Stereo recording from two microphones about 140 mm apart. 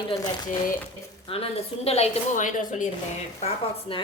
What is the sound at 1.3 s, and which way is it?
Speech, 45° left (ahead or behind).